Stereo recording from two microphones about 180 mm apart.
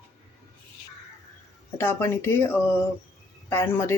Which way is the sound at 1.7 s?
15° left (ahead or behind).